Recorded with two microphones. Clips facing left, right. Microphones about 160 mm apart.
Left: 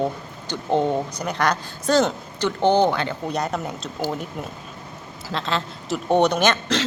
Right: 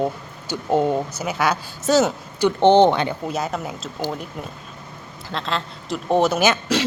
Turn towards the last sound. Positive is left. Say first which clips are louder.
# right 1 dB
turn(degrees=-10)  # may be behind; listen again after turning